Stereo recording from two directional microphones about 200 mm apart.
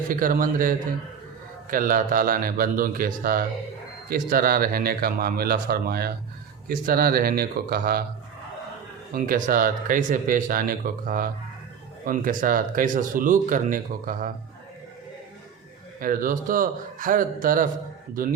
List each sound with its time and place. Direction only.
0.1 s speech: 45° right (ahead or behind)
9.1 s speech: 45° right (ahead or behind)
16.0 s speech: 45° right (ahead or behind)